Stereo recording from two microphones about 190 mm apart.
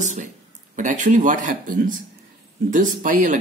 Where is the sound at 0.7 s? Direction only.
40° right (ahead or behind).